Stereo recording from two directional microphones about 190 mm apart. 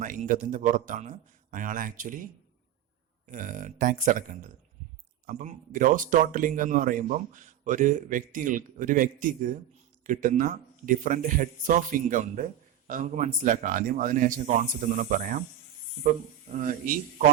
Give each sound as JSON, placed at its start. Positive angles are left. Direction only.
{"t": 0.0, "sound": "speech", "side_deg": -45}
{"t": 3.2, "sound": "speech", "side_deg": -45}
{"t": 16.5, "sound": "speech", "side_deg": -45}